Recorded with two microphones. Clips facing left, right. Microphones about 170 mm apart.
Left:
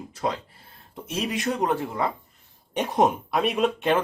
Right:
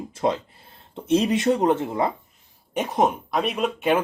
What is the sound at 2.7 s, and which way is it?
Speech, centre (ahead or behind).